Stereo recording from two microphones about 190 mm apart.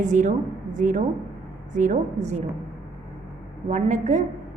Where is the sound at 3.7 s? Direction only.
40° right (ahead or behind).